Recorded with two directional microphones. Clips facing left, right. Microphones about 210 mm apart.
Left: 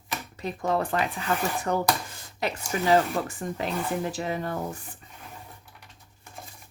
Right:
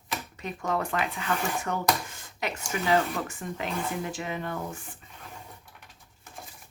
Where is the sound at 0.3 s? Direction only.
35° left (ahead or behind).